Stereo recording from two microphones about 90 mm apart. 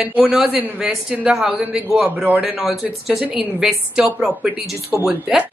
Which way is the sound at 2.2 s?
20° right (ahead or behind).